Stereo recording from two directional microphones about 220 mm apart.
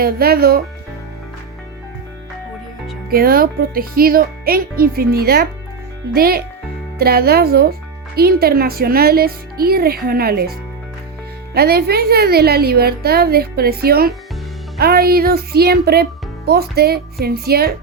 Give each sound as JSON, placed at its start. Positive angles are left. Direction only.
{"t": 0.0, "sound": "speech", "side_deg": -45}
{"t": 3.1, "sound": "speech", "side_deg": -40}
{"t": 11.5, "sound": "speech", "side_deg": -45}